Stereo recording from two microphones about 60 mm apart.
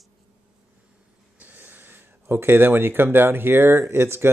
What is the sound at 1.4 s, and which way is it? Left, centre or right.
Speech, right.